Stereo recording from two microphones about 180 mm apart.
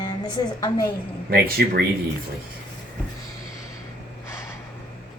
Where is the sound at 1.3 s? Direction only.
60° right (ahead or behind).